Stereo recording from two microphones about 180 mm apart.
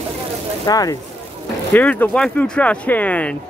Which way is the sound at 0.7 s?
20° left (ahead or behind).